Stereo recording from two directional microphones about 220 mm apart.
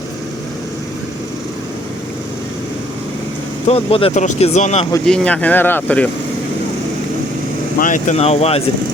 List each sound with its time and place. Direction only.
3.7 s speech: 25° left (ahead or behind)
5.0 s speech: 5° left (ahead or behind)
7.8 s speech: 35° left (ahead or behind)